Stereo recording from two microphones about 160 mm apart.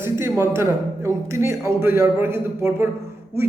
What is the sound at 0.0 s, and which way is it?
A man's voice, 15° right (ahead or behind).